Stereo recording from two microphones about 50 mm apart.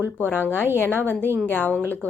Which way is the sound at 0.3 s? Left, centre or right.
Left.